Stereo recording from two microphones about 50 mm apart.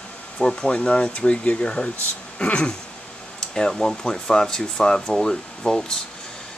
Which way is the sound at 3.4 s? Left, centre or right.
Centre.